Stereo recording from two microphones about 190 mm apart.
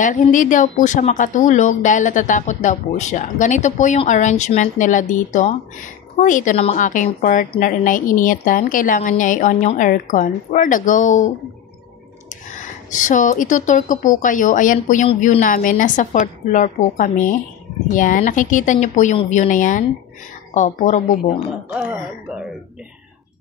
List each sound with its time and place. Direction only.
0.0 s speech: 40° left (ahead or behind)
12.3 s speech: 40° left (ahead or behind)
21.7 s speech: 10° right (ahead or behind)